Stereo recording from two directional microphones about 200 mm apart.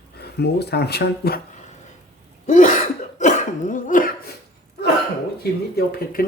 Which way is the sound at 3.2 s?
35° left (ahead or behind).